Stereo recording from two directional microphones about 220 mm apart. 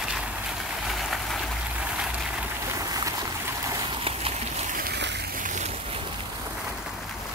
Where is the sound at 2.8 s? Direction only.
15° right (ahead or behind).